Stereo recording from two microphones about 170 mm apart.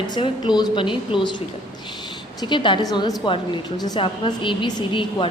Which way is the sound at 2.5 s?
30° left (ahead or behind).